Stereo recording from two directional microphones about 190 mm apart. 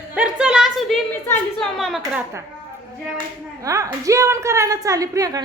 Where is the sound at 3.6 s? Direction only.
15° right (ahead or behind).